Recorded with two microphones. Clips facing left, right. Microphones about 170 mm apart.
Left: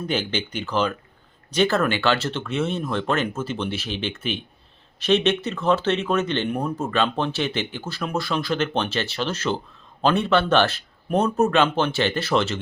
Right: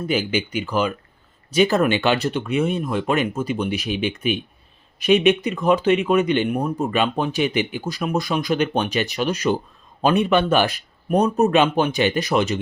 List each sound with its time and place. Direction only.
0.0 s speech: 10° right (ahead or behind)